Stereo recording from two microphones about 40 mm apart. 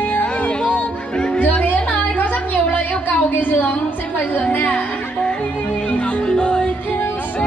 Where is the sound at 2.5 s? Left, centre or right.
Left.